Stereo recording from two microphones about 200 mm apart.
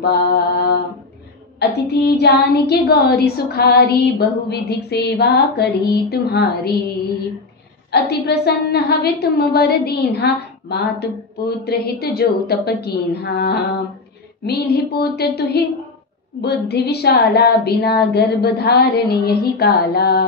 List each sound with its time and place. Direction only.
0.0 s a woman's voice: 50° left (ahead or behind)
1.9 s a woman's voice: 55° left (ahead or behind)
7.9 s a woman's voice: 55° left (ahead or behind)